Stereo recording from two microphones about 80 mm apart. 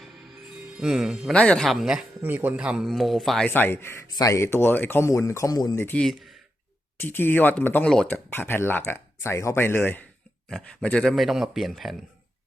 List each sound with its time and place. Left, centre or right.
0.8 s speech: centre
1.3 s speech: centre
1.6 s speech: centre
2.2 s speech: right
2.6 s speech: centre
3.5 s speech: left
4.1 s speech: left
4.4 s speech: left
5.9 s speech: centre
7.0 s speech: left
10.5 s speech: centre